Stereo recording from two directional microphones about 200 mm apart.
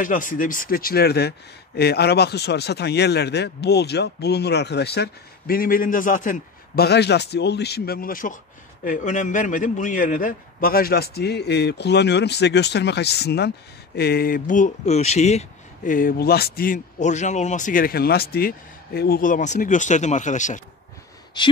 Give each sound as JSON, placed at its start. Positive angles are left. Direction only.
{"t": 0.0, "sound": "speech", "side_deg": 40}
{"t": 21.4, "sound": "speech", "side_deg": 20}